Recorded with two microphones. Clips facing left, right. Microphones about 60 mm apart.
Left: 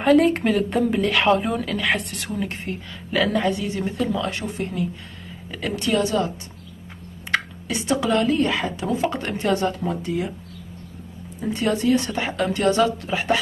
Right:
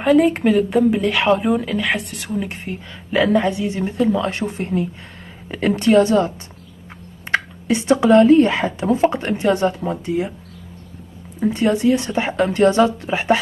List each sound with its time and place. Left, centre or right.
0.0 s speech: centre
2.7 s speech: centre
3.1 s a woman's voice: right
11.3 s speech: right